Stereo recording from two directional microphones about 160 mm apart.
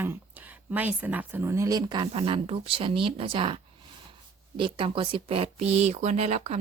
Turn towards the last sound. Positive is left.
turn(degrees=-40)  # may be behind; listen again after turning